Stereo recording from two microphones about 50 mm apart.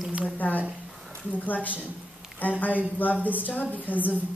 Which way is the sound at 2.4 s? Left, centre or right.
Left.